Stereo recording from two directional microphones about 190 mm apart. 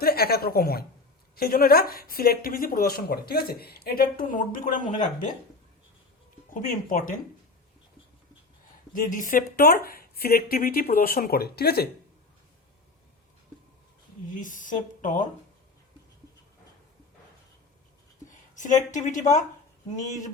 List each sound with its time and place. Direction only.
0.0 s speech: 55° left (ahead or behind)
6.5 s speech: 45° left (ahead or behind)
8.9 s speech: 45° left (ahead or behind)
14.3 s speech: 45° left (ahead or behind)
18.3 s a sound: 40° left (ahead or behind)
18.9 s speech: 40° left (ahead or behind)